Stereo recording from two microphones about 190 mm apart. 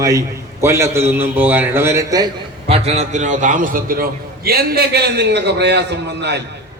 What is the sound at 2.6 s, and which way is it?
A man's voice, 30° right (ahead or behind).